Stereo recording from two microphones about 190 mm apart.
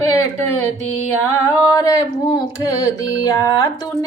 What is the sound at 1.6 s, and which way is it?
Female singing, 15° left (ahead or behind).